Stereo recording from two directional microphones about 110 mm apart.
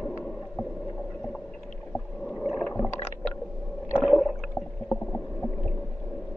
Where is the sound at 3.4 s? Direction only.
5° left (ahead or behind).